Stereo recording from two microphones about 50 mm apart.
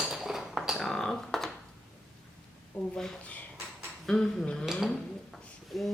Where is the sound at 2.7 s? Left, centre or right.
Left.